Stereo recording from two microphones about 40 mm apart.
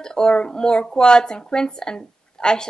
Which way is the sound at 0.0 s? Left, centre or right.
Centre.